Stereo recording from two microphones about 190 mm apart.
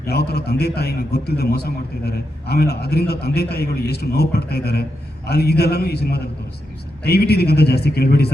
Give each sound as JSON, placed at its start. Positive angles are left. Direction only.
{"t": 0.1, "sound": "a man's voice", "side_deg": 55}